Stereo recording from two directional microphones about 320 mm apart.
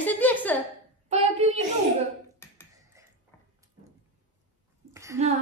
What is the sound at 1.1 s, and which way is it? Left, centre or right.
Child singing, centre.